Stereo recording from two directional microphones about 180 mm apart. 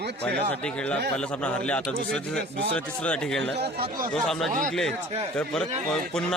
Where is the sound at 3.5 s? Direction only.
60° right (ahead or behind).